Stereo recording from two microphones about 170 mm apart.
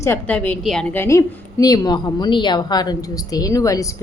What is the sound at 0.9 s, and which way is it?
A woman's voice, 20° left (ahead or behind).